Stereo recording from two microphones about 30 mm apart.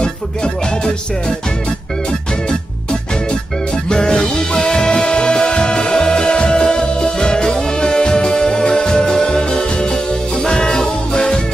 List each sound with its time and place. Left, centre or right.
0.0 s music: left
3.9 s music: left